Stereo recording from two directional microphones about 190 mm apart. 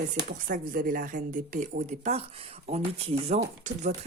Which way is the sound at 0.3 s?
45° right (ahead or behind).